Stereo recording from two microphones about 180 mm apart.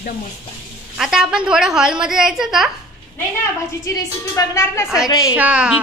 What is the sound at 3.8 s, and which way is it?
A woman's voice, 20° left (ahead or behind).